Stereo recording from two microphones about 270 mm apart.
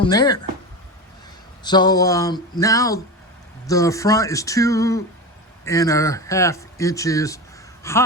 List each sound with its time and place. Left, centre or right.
0.0 s speech: centre
1.6 s speech: centre